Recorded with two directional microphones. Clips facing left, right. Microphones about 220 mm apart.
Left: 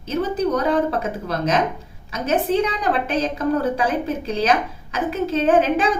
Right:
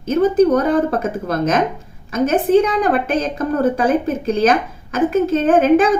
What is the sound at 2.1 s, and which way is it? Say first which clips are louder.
A woman's voice: right 6 dB; 50° right (ahead or behind).